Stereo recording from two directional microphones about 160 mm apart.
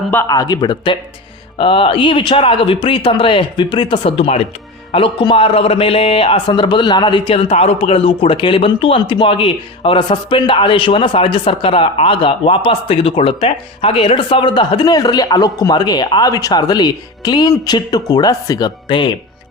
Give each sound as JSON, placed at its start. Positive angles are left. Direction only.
{"t": 0.3, "sound": "a man's voice", "side_deg": 25}